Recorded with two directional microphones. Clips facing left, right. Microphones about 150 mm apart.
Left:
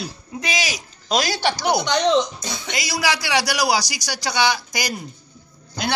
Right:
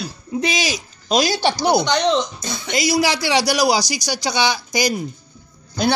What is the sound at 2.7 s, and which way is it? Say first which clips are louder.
A man's voice: right 6 dB; 25° right (ahead or behind).